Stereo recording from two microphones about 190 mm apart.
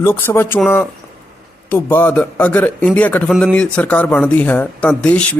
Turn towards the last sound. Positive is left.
turn(degrees=5)  # may be behind; listen again after turning